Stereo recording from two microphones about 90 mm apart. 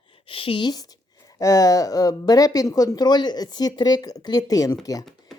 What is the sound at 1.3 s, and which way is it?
A woman's voice, 40° left (ahead or behind).